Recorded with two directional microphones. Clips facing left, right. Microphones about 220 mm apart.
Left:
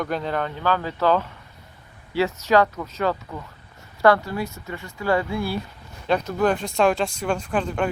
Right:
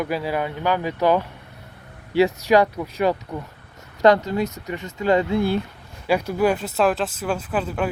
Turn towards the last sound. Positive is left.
turn(degrees=-5)  # may be behind; listen again after turning